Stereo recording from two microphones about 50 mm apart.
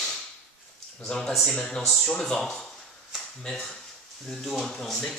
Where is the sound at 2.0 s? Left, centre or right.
Centre.